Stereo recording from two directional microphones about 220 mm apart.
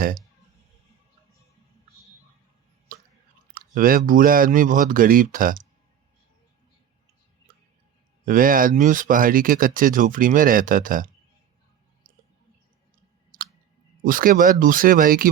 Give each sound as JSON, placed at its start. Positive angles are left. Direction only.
{"t": 2.9, "sound": "chewing", "side_deg": -40}
{"t": 3.5, "sound": "speech", "side_deg": -40}
{"t": 8.2, "sound": "speech", "side_deg": -40}
{"t": 13.3, "sound": "a sound", "side_deg": -40}
{"t": 14.0, "sound": "speech", "side_deg": -40}